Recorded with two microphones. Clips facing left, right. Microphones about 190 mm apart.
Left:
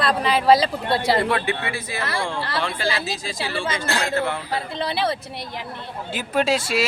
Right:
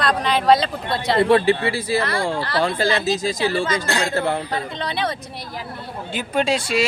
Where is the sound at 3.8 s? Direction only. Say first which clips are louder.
Right 2 dB; centre (ahead or behind).